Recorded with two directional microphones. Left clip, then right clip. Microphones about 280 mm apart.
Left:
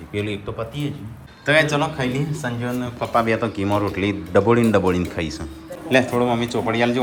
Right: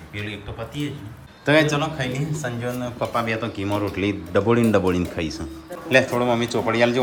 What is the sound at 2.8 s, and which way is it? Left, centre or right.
Speech, centre.